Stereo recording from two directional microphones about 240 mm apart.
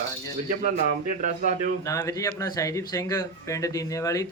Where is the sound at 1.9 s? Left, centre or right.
Centre.